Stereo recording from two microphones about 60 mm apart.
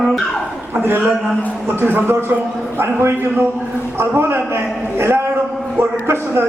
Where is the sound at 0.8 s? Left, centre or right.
Right.